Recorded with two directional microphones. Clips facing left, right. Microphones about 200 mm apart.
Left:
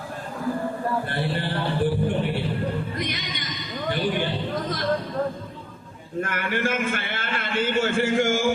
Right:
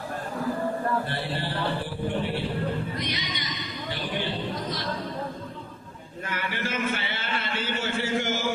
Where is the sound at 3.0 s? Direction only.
50° left (ahead or behind).